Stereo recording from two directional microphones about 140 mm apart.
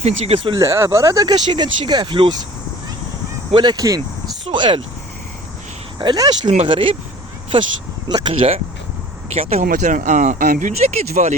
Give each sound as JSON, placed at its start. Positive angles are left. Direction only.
{"t": 0.0, "sound": "speech", "side_deg": -50}
{"t": 0.6, "sound": "speech", "side_deg": -20}
{"t": 3.5, "sound": "speech", "side_deg": -30}
{"t": 4.4, "sound": "speech", "side_deg": -40}
{"t": 6.0, "sound": "speech", "side_deg": -30}
{"t": 8.1, "sound": "speech", "side_deg": -40}
{"t": 9.6, "sound": "speech", "side_deg": -65}